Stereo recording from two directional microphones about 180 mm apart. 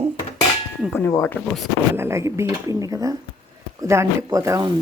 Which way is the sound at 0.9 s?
15° left (ahead or behind).